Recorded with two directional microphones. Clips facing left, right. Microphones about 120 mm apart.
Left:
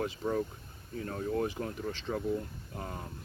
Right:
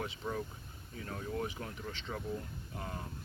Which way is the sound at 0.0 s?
40° left (ahead or behind).